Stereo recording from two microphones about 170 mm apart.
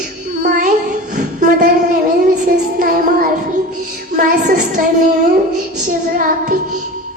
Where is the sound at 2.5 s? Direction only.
60° right (ahead or behind).